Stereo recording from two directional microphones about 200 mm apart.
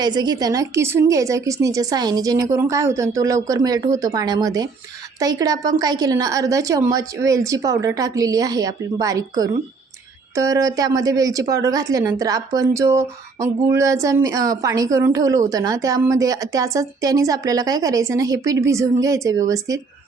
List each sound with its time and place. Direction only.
0.0 s a woman's voice: 20° right (ahead or behind)